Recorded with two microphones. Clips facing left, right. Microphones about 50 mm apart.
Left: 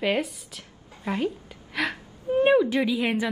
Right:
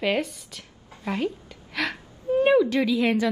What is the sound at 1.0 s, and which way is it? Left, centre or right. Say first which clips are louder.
Speech: even; left.